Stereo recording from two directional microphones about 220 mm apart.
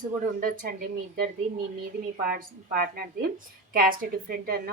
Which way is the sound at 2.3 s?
40° right (ahead or behind).